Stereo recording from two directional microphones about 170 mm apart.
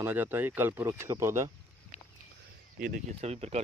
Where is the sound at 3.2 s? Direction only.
40° right (ahead or behind).